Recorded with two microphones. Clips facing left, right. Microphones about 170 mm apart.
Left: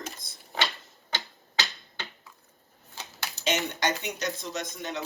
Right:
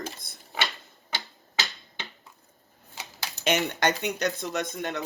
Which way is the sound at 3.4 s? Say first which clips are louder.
Right 3 dB; 55° right (ahead or behind).